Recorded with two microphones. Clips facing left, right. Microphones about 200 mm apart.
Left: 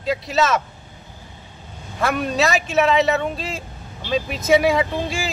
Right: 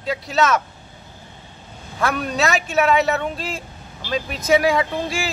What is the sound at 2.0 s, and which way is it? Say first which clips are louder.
A man's voice: left 1 dB; 5° left (ahead or behind).